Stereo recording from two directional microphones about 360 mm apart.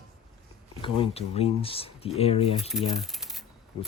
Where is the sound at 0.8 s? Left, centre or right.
Centre.